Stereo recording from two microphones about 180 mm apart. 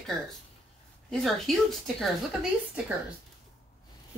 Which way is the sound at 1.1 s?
Centre (ahead or behind).